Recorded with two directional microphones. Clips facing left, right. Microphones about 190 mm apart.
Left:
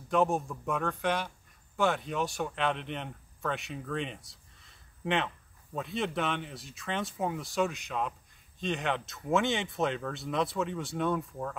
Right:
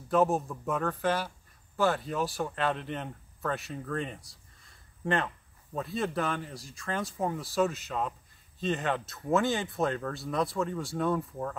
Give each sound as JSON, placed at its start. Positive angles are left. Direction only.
{"t": 0.1, "sound": "speech", "side_deg": 0}